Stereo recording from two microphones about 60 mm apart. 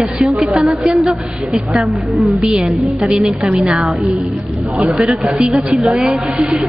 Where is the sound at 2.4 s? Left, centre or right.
Centre.